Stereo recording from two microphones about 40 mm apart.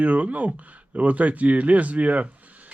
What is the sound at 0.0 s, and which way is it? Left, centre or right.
Speech, right.